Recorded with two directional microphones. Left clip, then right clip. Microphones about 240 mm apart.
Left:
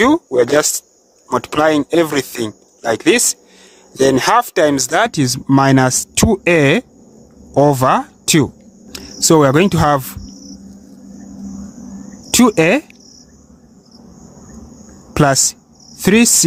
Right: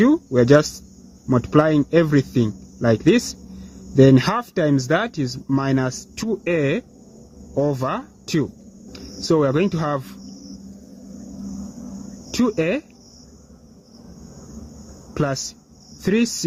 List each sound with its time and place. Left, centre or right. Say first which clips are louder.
0.0 s speech: left 5 dB; left
12.3 s speech: left 9 dB; left
15.1 s speech: left 11 dB; left